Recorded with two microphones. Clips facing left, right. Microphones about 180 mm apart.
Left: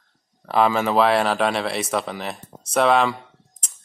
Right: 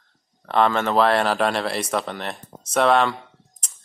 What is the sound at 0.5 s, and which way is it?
Speech, 5° left (ahead or behind).